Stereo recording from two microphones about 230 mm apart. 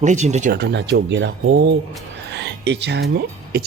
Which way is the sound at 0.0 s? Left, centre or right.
Right.